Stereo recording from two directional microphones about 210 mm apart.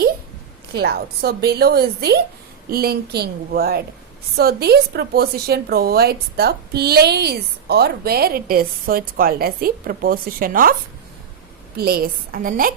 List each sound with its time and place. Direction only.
0.7 s a woman's voice: 50° right (ahead or behind)
11.8 s a woman's voice: 45° right (ahead or behind)